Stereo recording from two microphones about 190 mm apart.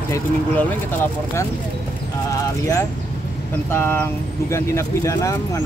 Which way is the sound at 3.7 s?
10° left (ahead or behind).